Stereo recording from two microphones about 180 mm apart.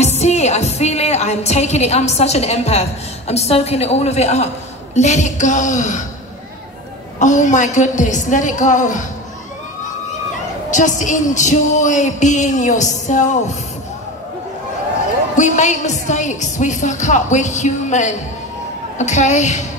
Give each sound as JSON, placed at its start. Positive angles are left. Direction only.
{"t": 0.0, "sound": "a woman's voice", "side_deg": 35}
{"t": 7.2, "sound": "speech", "side_deg": 45}
{"t": 10.7, "sound": "speech", "side_deg": 45}
{"t": 15.3, "sound": "a woman's voice", "side_deg": 40}